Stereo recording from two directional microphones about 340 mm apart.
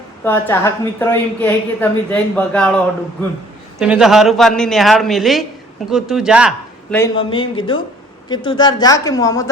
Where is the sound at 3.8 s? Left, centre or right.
Centre.